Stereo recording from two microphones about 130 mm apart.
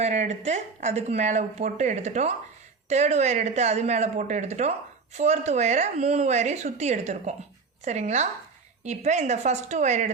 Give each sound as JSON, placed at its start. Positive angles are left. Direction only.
{"t": 0.0, "sound": "speech", "side_deg": -60}